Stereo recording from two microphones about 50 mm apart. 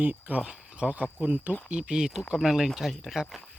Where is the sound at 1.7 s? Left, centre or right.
Centre.